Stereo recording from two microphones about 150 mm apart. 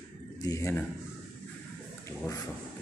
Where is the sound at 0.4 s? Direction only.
20° left (ahead or behind).